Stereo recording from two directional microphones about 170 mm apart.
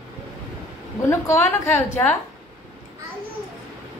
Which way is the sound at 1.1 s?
15° left (ahead or behind).